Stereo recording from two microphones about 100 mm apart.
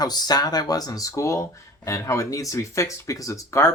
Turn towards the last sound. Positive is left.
turn(degrees=30)  # may be behind; listen again after turning